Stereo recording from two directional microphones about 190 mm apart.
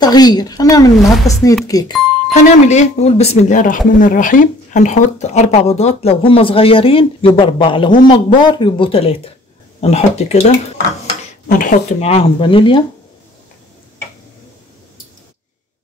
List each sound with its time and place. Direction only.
0.0 s speech: 20° left (ahead or behind)
2.3 s speech: 35° left (ahead or behind)
11.4 s speech: 45° left (ahead or behind); by 12.8 s 25° left (ahead or behind)